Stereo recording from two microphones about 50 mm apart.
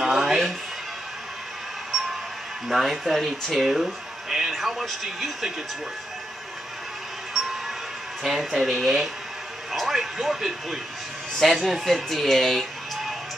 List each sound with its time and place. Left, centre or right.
0.0 s music: centre
2.7 s speech: centre
7.3 s music: centre
8.2 s speech: centre